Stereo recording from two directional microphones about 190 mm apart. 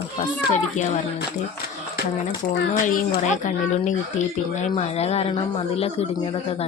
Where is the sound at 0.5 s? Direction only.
40° left (ahead or behind).